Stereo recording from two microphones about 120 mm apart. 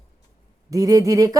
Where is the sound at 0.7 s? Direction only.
30° right (ahead or behind).